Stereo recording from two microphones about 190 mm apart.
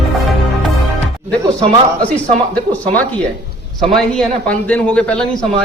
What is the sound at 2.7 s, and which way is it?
A man's voice, 10° left (ahead or behind).